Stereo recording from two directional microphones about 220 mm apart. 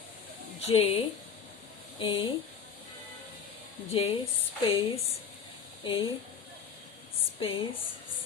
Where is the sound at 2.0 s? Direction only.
25° left (ahead or behind).